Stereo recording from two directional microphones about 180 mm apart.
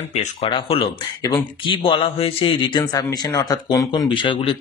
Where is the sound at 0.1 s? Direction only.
40° left (ahead or behind).